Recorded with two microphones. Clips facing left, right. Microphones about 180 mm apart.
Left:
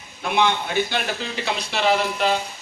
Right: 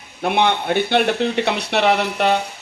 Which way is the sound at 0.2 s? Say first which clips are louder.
Right 3 dB; 60° right (ahead or behind).